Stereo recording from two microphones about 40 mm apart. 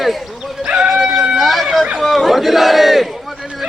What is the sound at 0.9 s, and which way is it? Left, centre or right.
Dog, centre.